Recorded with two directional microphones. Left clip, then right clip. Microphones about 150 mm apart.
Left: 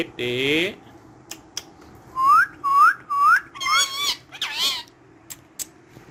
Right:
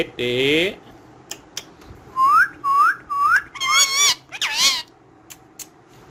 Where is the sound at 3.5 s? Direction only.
25° right (ahead or behind).